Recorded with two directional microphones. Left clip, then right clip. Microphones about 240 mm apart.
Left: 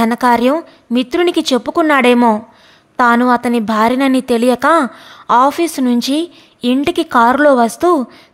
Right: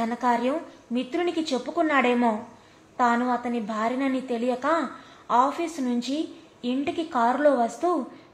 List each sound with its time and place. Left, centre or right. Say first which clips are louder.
0.0 s a woman's voice: left 12 dB; left